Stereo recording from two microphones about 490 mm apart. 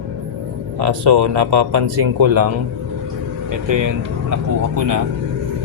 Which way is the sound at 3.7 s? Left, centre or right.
Right.